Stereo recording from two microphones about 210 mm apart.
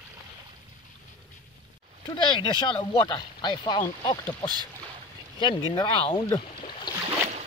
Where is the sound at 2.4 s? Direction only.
20° left (ahead or behind).